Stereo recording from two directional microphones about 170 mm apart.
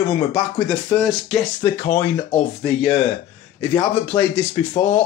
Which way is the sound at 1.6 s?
15° left (ahead or behind).